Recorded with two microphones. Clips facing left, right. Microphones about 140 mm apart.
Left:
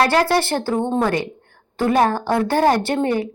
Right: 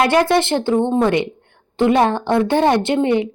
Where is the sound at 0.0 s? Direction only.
20° right (ahead or behind).